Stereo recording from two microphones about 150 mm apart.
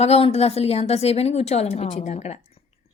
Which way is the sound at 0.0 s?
40° left (ahead or behind).